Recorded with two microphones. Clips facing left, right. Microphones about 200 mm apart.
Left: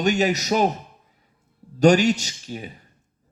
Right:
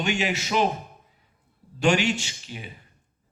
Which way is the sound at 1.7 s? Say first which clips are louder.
Left 6 dB; 40° left (ahead or behind).